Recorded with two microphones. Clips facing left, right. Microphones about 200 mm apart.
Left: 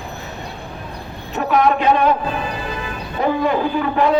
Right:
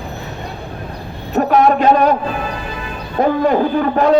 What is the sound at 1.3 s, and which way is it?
Speech, 45° right (ahead or behind).